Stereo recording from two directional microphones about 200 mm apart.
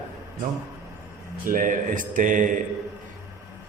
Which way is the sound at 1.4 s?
40° right (ahead or behind).